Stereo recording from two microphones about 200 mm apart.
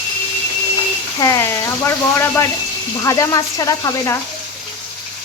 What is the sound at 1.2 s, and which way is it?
Speech, 15° left (ahead or behind).